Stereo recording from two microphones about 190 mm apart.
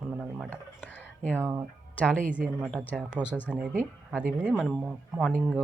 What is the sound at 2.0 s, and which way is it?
Speech, 5° left (ahead or behind).